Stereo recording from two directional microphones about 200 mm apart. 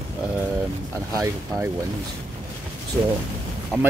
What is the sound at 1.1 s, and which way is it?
Speech, 15° right (ahead or behind).